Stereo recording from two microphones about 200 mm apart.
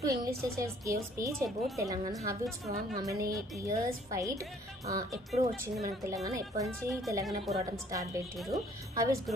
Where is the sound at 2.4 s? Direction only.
Centre (ahead or behind).